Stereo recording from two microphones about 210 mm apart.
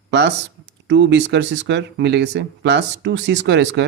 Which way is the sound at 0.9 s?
55° right (ahead or behind).